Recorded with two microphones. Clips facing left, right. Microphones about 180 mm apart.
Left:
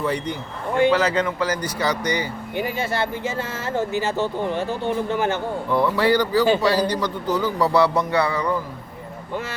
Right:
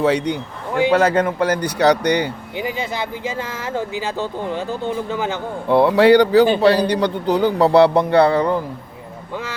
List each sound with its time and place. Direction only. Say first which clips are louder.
0.0 s a man's voice: right 7 dB; 85° right
0.9 s a man's voice: right 7 dB; 55° right (ahead or behind)
2.6 s speech: left 1 dB; 15° right (ahead or behind)
5.6 s a man's voice: right 8 dB; 70° right (ahead or behind)